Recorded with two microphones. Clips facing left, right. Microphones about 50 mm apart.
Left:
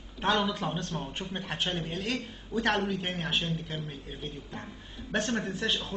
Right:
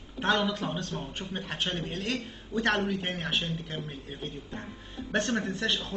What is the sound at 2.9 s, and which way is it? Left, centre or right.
Speech, right.